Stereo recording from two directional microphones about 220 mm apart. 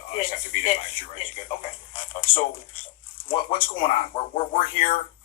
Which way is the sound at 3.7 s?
25° left (ahead or behind).